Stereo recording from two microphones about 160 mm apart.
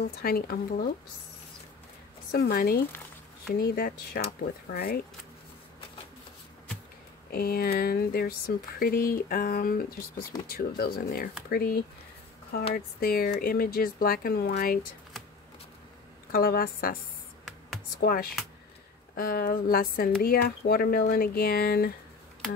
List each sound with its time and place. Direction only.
0.0 s speech: 70° left (ahead or behind)
2.3 s speech: 70° left (ahead or behind)
2.9 s a sound: 10° left (ahead or behind)
3.5 s speech: 70° left (ahead or behind)
7.3 s speech: 70° left (ahead or behind)
13.0 s speech: 65° left (ahead or behind)
16.3 s speech: 65° left (ahead or behind)
18.0 s speech: 65° left (ahead or behind)